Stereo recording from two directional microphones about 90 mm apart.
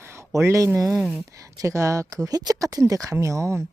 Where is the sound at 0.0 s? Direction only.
30° right (ahead or behind).